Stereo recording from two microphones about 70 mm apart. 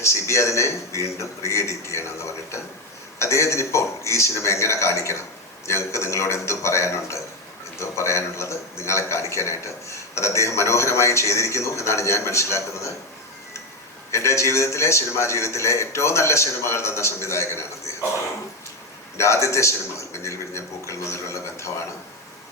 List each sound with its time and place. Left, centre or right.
0.0 s a man's voice: left
14.1 s a man's voice: left
19.1 s a man's voice: left